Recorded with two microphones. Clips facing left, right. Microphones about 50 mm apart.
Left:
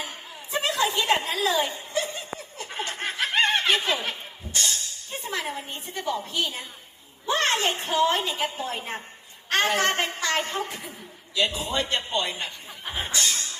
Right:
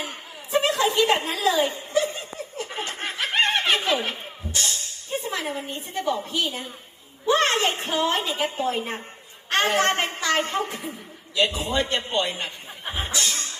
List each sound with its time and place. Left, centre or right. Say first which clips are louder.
0.0 s a sound: right 2 dB; right
4.6 s a man's voice: even; right
13.1 s music: left 1 dB; right